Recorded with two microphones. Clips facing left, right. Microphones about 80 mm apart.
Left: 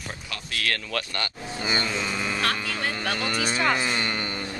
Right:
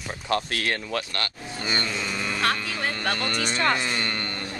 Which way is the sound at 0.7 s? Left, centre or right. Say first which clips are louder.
Even; right.